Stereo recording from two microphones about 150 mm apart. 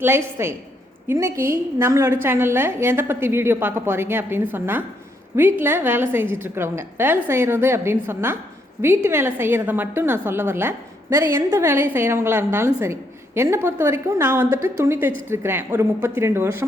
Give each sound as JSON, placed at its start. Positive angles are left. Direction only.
{"t": 0.4, "sound": "a woman's voice", "side_deg": -15}